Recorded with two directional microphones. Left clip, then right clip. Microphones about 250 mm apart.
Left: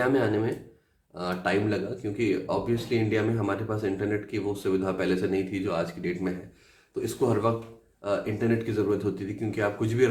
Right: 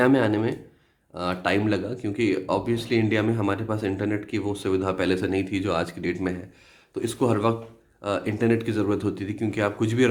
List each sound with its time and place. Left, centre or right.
0.0 s speech: right